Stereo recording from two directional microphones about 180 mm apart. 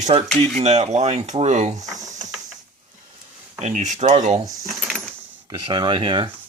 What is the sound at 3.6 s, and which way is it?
Speech, 40° right (ahead or behind).